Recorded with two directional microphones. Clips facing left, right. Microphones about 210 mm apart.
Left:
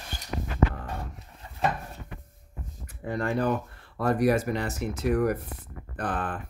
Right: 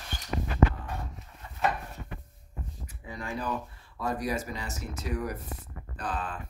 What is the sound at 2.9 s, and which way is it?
Speech, 60° left (ahead or behind).